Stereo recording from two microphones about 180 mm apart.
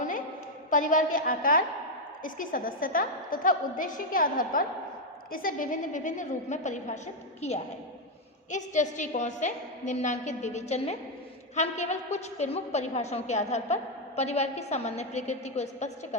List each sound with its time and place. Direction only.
0.7 s a woman's voice: 45° left (ahead or behind)
8.4 s a woman's voice: 45° left (ahead or behind)